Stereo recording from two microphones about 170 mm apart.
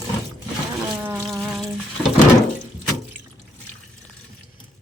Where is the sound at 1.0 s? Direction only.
Centre (ahead or behind).